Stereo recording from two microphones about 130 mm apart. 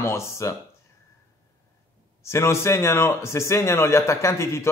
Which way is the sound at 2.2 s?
20° left (ahead or behind).